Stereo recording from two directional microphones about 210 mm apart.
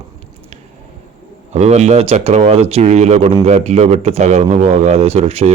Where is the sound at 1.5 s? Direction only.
30° right (ahead or behind).